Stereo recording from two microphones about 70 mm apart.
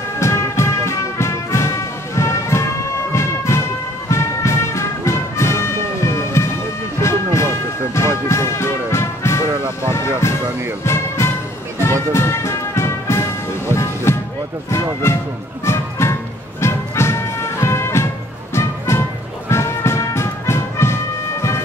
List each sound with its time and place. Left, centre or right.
0.2 s music: left
9.8 s a sound: left
10.8 s music: left
15.6 s music: left